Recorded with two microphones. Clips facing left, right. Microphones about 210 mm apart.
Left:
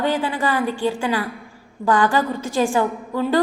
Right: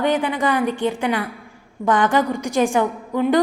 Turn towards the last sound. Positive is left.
turn(degrees=-20)  # may be behind; listen again after turning